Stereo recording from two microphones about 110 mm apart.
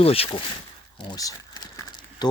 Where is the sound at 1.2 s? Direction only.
35° left (ahead or behind).